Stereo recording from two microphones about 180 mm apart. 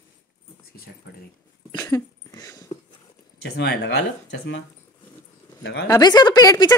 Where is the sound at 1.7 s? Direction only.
15° left (ahead or behind).